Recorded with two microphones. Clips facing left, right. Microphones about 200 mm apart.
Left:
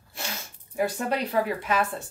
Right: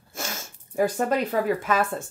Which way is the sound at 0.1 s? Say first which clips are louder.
Right 3 dB; 45° right (ahead or behind).